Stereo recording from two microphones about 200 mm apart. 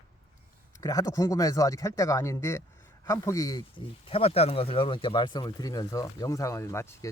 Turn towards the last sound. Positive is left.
turn(degrees=15)  # may be behind; listen again after turning